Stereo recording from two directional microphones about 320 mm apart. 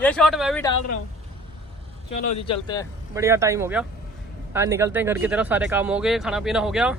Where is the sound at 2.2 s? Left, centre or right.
Centre.